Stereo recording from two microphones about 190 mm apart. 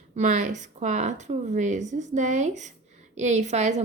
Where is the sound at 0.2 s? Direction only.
40° right (ahead or behind).